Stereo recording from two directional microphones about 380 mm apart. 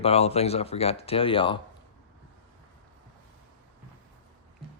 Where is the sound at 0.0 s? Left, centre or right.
Centre.